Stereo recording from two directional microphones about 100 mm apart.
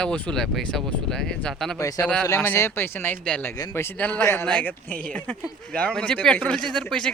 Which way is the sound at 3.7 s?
25° left (ahead or behind).